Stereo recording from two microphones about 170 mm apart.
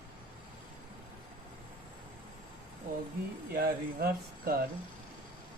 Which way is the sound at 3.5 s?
65° right (ahead or behind).